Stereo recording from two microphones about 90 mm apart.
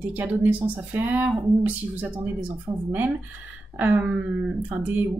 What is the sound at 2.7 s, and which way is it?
Speech, 40° right (ahead or behind).